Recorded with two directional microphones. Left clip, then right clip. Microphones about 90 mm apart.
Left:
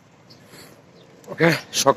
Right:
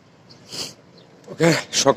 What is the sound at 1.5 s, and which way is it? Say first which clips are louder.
Speech: right 2 dB; 40° right (ahead or behind).